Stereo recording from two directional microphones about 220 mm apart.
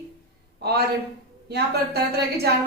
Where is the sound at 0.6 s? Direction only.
45° right (ahead or behind).